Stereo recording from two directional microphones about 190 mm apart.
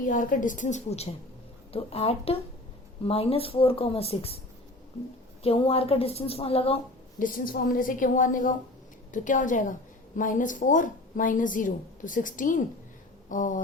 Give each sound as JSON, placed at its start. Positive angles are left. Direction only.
{"t": 0.0, "sound": "a woman's voice", "side_deg": 45}
{"t": 5.4, "sound": "a woman's voice", "side_deg": 30}
{"t": 7.2, "sound": "a woman's voice", "side_deg": 45}
{"t": 13.2, "sound": "a sound", "side_deg": 45}